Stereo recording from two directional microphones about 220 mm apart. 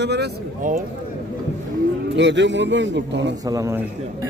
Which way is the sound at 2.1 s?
55° right (ahead or behind).